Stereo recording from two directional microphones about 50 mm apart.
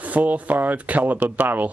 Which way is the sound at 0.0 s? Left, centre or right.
Right.